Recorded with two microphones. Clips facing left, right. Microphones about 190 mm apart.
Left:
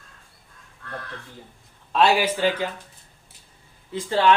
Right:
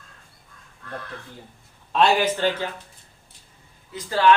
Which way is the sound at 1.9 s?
5° left (ahead or behind).